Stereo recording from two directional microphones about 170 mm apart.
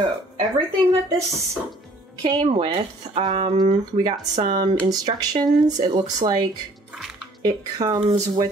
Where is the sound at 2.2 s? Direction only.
30° right (ahead or behind).